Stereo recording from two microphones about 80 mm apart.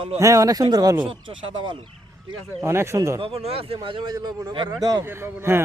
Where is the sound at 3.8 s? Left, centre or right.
Right.